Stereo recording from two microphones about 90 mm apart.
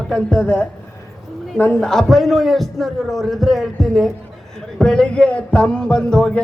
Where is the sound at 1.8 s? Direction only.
5° left (ahead or behind).